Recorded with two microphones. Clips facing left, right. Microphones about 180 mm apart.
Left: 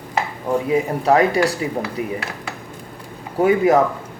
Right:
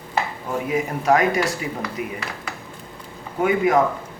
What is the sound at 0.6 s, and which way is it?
Speech, 30° left (ahead or behind).